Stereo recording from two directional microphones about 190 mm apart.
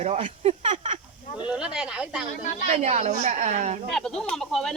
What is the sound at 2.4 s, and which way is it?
Speech, 40° left (ahead or behind).